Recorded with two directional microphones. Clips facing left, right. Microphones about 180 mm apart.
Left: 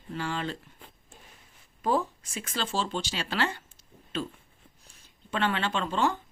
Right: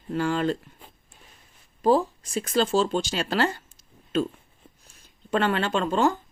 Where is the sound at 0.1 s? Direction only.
45° right (ahead or behind).